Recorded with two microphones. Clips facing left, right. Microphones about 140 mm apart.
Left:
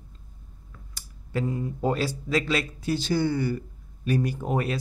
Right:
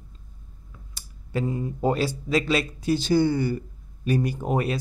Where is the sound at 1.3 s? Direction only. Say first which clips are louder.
Right 1 dB; 20° right (ahead or behind).